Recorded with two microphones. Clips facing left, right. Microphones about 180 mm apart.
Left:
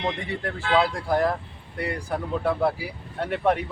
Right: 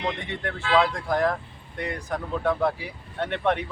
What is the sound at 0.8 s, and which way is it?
Speech, 10° left (ahead or behind).